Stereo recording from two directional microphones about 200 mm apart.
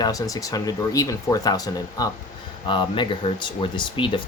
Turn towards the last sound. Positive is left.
turn(degrees=25)  # may be behind; listen again after turning